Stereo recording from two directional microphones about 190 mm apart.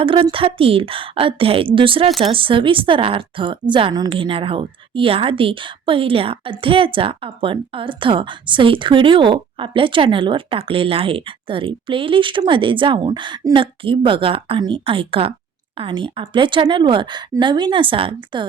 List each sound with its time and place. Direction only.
0.0 s a woman's voice: 30° right (ahead or behind)